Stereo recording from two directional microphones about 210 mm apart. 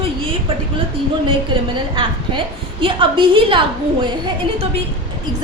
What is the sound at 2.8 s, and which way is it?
Speech, 25° right (ahead or behind).